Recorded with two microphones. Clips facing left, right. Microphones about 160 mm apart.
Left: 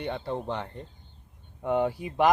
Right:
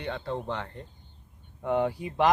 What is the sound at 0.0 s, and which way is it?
Speech, 15° left (ahead or behind).